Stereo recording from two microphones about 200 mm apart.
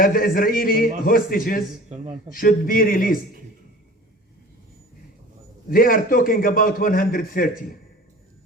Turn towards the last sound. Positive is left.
turn(degrees=45)  # may be behind; listen again after turning